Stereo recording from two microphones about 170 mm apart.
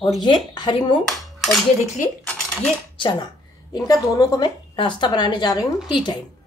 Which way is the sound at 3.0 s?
25° left (ahead or behind).